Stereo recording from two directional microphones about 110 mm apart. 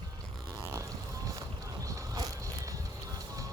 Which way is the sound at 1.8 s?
30° right (ahead or behind).